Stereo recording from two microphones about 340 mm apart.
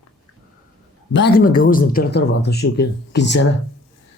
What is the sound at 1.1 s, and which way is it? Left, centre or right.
Speech, left.